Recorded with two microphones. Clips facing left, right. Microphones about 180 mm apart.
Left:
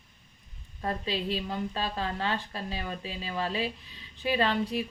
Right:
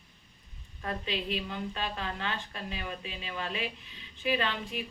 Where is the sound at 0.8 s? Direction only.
35° left (ahead or behind).